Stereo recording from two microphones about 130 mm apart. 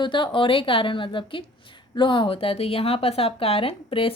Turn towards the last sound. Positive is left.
turn(degrees=45)  # may be behind; listen again after turning